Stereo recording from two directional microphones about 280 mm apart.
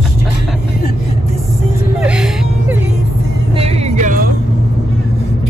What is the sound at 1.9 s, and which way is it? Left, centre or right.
Music, centre.